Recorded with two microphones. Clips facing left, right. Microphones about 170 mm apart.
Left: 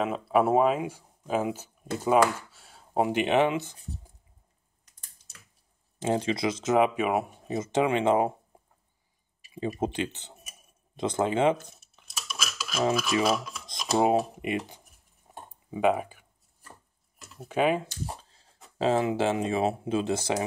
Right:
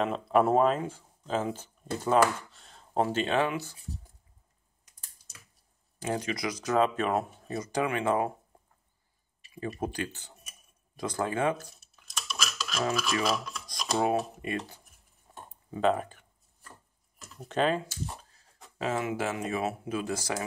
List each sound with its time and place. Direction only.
0.0 s speech: 5° left (ahead or behind); by 3.7 s 20° left (ahead or behind)
5.9 s speech: 25° left (ahead or behind); by 7.5 s 10° left (ahead or behind)
7.5 s speech: 25° left (ahead or behind)
9.5 s speech: 25° left (ahead or behind)
12.1 s a sound: 5° left (ahead or behind)
13.2 s dishes: 5° left (ahead or behind)
13.9 s speech: 20° left (ahead or behind)
15.3 s a sound: 15° left (ahead or behind)
15.7 s speech: 10° left (ahead or behind)
18.3 s a sound: 30° left (ahead or behind)
18.8 s speech: 30° left (ahead or behind)